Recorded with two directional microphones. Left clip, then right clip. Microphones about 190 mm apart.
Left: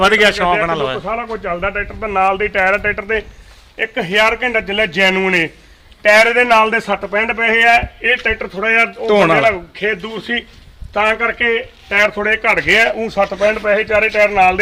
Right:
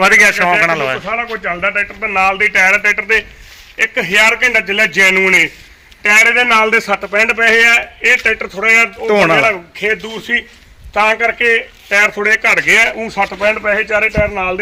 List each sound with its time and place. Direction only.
0.0 s a man's voice: centre (ahead or behind)
1.0 s a man's voice: 35° left (ahead or behind); by 8.4 s 55° left (ahead or behind)
9.0 s a man's voice: centre (ahead or behind)
9.5 s speech: 40° left (ahead or behind); by 14.6 s 60° left (ahead or behind)